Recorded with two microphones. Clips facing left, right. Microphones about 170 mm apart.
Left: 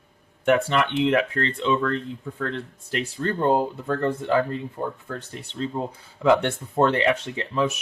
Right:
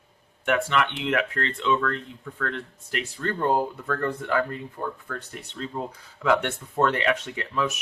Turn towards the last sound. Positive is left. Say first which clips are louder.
# left 3 dB
turn(degrees=30)  # may be behind; listen again after turning